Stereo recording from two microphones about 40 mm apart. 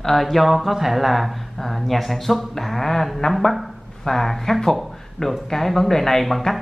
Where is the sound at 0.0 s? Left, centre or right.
Centre.